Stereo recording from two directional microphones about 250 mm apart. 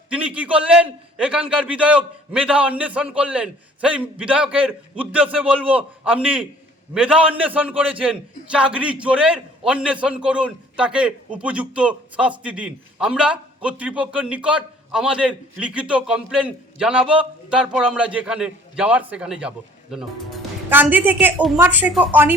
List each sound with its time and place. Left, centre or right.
0.1 s a man's voice: centre